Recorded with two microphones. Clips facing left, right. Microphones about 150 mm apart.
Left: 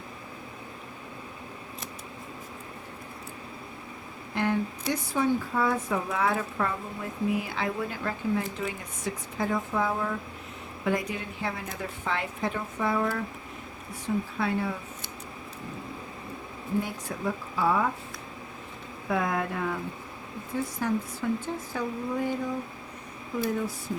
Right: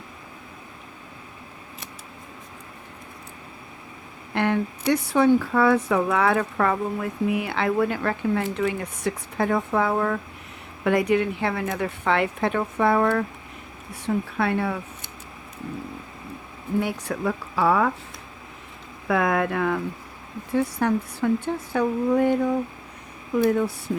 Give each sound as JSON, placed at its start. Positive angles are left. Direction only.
{"t": 4.4, "sound": "speech", "side_deg": -70}
{"t": 14.3, "sound": "speech", "side_deg": -65}
{"t": 16.8, "sound": "speech", "side_deg": -75}
{"t": 19.0, "sound": "speech", "side_deg": -75}
{"t": 23.4, "sound": "speech", "side_deg": -65}